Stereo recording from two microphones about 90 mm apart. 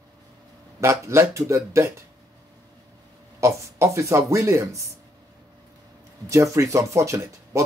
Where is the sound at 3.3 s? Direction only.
30° right (ahead or behind).